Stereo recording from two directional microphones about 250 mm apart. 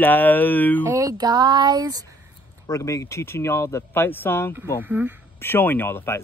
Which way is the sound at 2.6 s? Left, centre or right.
Centre.